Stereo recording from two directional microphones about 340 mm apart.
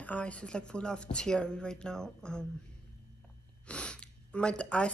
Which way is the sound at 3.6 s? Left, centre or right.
Centre.